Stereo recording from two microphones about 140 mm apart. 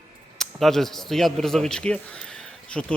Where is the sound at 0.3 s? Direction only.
Centre (ahead or behind).